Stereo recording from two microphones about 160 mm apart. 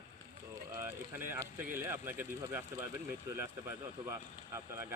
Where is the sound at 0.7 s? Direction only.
15° right (ahead or behind).